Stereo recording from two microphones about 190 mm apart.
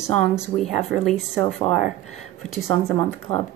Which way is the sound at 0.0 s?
5° left (ahead or behind).